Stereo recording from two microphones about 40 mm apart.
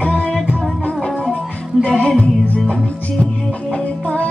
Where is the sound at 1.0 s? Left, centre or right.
Centre.